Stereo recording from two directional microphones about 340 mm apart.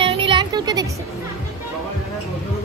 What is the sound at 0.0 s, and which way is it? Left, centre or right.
Music, centre.